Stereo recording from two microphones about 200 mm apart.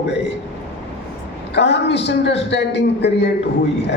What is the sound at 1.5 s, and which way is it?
A man's voice, 60° left (ahead or behind).